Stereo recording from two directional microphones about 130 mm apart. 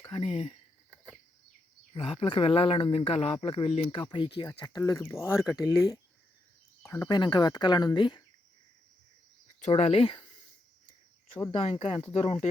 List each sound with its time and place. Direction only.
0.1 s speech: 50° left (ahead or behind)
1.9 s speech: 45° left (ahead or behind); by 5.4 s 20° left (ahead or behind)
5.4 s speech: 5° right (ahead or behind)
6.8 s speech: 25° left (ahead or behind)
7.2 s speech: 35° left (ahead or behind)
9.6 s speech: 60° left (ahead or behind)
10.0 s speech: 40° left (ahead or behind)
11.5 s speech: 45° left (ahead or behind)
12.1 s speech: 55° left (ahead or behind)